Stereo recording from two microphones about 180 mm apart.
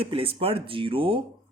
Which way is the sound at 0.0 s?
30° right (ahead or behind).